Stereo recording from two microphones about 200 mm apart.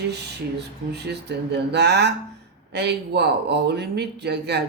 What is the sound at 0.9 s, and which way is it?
Speech, 55° right (ahead or behind).